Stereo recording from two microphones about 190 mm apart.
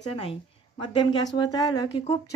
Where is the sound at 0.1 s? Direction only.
30° left (ahead or behind).